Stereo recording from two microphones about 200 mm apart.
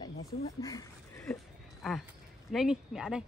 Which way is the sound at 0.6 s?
15° left (ahead or behind).